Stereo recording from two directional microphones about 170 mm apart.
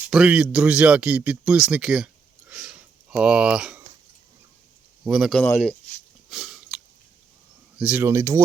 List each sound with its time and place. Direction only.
0.1 s speech: 5° right (ahead or behind)
2.5 s a sound: 5° right (ahead or behind)
5.0 s speech: 5° right (ahead or behind)
6.3 s chewing: centre (ahead or behind)
7.8 s speech: 10° right (ahead or behind)